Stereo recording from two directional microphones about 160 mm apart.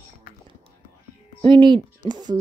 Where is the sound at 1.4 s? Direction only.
30° right (ahead or behind).